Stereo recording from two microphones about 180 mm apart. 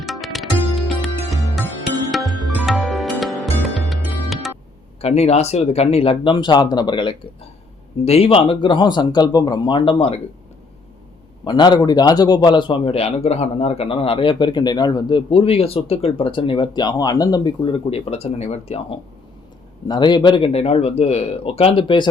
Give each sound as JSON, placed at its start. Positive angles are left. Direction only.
{"t": 0.0, "sound": "music", "side_deg": 0}
{"t": 4.9, "sound": "a man's voice", "side_deg": 35}
{"t": 11.4, "sound": "a man's voice", "side_deg": 25}
{"t": 19.9, "sound": "speech", "side_deg": 25}